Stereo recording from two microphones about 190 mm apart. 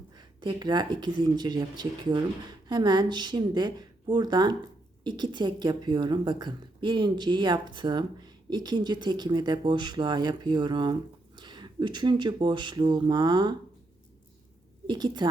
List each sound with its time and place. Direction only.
0.2 s a woman's voice: 25° right (ahead or behind)
14.8 s a woman's voice: 20° right (ahead or behind)